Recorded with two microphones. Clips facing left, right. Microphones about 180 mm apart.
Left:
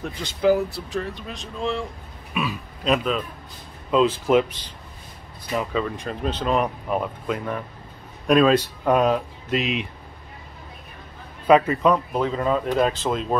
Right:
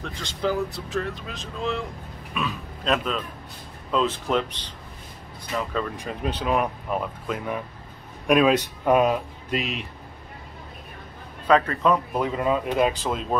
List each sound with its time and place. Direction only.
0.0 s a man's voice: 10° left (ahead or behind)
5.9 s speech: 10° right (ahead or behind)
9.6 s speech: 45° right (ahead or behind)
11.4 s speech: 10° left (ahead or behind)
11.9 s speech: 5° right (ahead or behind)